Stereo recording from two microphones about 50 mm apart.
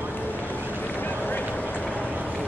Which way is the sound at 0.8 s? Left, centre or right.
Left.